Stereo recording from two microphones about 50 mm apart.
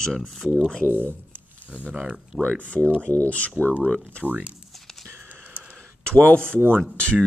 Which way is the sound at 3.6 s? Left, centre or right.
Left.